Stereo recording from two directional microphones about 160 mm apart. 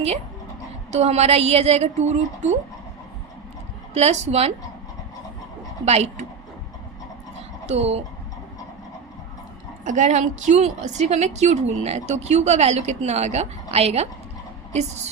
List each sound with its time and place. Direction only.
0.9 s a woman's voice: 40° right (ahead or behind)
3.9 s a woman's voice: 45° right (ahead or behind)
5.8 s speech: 40° right (ahead or behind)
7.7 s speech: 40° right (ahead or behind)
9.8 s a woman's voice: 50° right (ahead or behind)